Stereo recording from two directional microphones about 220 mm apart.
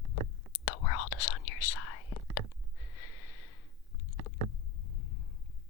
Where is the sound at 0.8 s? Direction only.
90° left.